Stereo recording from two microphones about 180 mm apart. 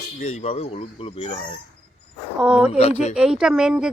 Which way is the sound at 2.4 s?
5° right (ahead or behind).